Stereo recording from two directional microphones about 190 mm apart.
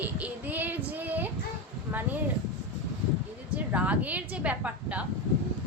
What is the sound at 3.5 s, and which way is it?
A woman's voice, 10° right (ahead or behind).